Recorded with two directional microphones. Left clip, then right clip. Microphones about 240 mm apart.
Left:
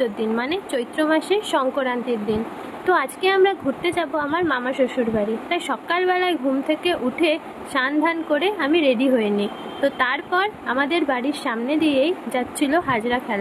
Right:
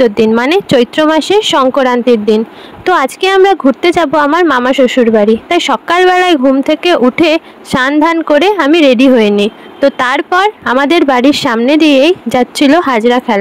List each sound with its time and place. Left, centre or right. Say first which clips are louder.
0.0 s speech: right 14 dB; right